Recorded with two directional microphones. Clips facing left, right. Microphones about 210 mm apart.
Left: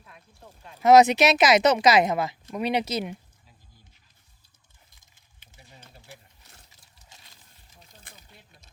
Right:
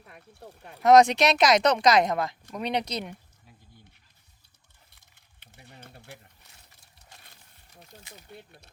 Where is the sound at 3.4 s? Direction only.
60° right (ahead or behind).